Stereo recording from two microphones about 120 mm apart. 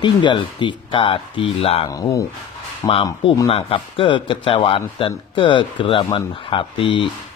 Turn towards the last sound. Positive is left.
turn(degrees=45)  # may be behind; listen again after turning